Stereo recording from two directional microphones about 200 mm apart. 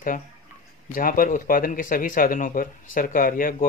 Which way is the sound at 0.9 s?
45° left (ahead or behind).